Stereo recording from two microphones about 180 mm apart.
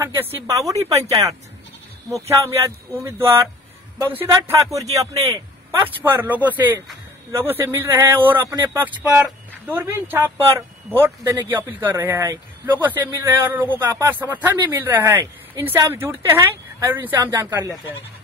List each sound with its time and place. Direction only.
0.0 s speech: 15° right (ahead or behind)